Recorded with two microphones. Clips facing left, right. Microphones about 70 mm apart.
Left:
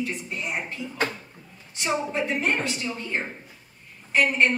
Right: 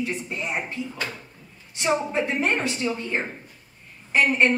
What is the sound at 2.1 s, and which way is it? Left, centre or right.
Speech, centre.